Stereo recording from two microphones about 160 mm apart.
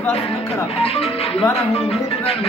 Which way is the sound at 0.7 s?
40° left (ahead or behind).